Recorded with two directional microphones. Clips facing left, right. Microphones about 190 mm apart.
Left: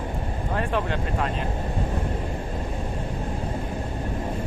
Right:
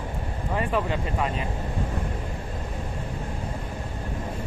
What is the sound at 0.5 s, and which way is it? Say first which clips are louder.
Speech: right 1 dB; 5° right (ahead or behind).